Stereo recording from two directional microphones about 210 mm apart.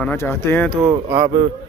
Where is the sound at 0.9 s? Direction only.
15° right (ahead or behind).